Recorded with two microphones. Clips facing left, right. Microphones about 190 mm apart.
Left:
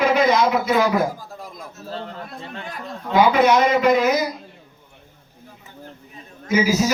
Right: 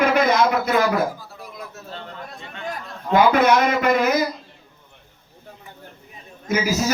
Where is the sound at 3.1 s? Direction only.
50° right (ahead or behind).